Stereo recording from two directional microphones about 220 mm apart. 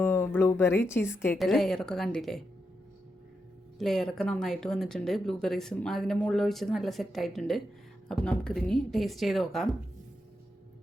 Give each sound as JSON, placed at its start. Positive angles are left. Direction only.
{"t": 0.0, "sound": "speech", "side_deg": 10}
{"t": 1.4, "sound": "speech", "side_deg": 0}
{"t": 3.8, "sound": "speech", "side_deg": 0}